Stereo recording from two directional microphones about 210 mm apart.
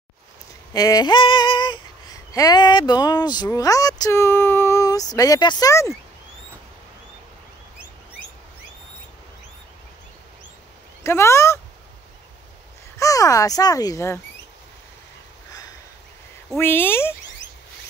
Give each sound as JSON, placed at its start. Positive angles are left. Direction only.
{"t": 0.7, "sound": "female singing", "side_deg": 15}
{"t": 11.1, "sound": "female singing", "side_deg": 10}
{"t": 12.9, "sound": "female singing", "side_deg": 15}
{"t": 16.4, "sound": "female singing", "side_deg": 10}